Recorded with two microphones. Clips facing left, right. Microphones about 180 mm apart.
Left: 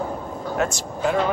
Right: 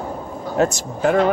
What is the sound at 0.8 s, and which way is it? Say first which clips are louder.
Speech: right 4 dB; 55° right (ahead or behind).